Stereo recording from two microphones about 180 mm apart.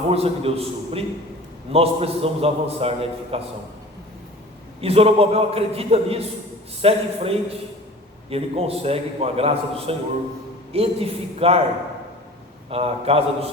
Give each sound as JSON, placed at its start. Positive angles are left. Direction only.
{"t": 0.1, "sound": "a man's voice", "side_deg": -35}
{"t": 4.8, "sound": "a man's voice", "side_deg": -35}
{"t": 12.7, "sound": "a man's voice", "side_deg": -35}